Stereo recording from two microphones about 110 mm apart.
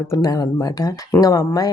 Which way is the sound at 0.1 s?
35° left (ahead or behind).